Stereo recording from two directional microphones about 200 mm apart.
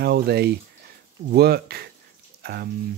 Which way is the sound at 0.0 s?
50° right (ahead or behind).